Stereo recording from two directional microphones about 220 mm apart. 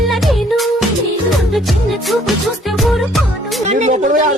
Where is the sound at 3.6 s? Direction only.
30° right (ahead or behind).